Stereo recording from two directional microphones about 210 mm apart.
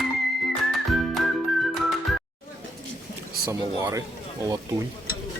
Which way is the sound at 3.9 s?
15° right (ahead or behind).